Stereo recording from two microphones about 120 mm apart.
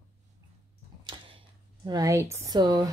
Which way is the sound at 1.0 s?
40° right (ahead or behind).